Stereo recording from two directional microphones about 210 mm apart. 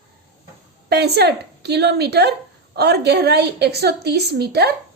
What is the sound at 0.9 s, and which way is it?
A woman's voice, 50° right (ahead or behind).